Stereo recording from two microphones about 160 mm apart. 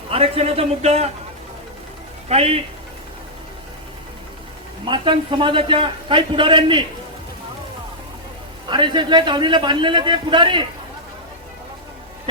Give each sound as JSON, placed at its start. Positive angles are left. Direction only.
{"t": 0.1, "sound": "a man's voice", "side_deg": -40}
{"t": 2.3, "sound": "a man's voice", "side_deg": -40}
{"t": 4.9, "sound": "a man's voice", "side_deg": -30}
{"t": 8.7, "sound": "a man's voice", "side_deg": -30}